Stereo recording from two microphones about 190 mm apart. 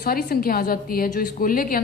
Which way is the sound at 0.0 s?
55° left (ahead or behind).